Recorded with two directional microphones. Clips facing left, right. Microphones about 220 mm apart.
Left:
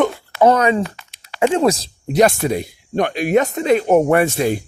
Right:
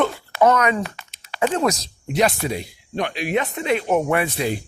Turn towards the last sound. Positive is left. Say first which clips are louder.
# left 6 dB
turn(degrees=45)  # may be behind; listen again after turning